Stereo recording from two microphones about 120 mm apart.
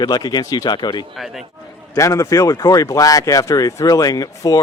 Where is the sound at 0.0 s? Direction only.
35° left (ahead or behind).